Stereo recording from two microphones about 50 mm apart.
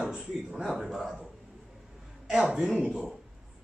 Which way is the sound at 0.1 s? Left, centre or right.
Centre.